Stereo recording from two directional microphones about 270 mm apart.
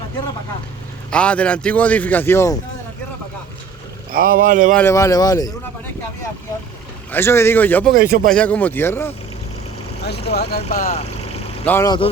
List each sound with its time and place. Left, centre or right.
1.1 s a man's voice: centre
4.1 s speech: right
4.7 s speech: centre
7.1 s speech: centre
7.9 s speech: right
8.3 s speech: centre
10.0 s speech: left
11.6 s speech: centre